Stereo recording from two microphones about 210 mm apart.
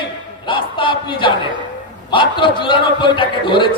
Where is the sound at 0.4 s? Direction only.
25° left (ahead or behind).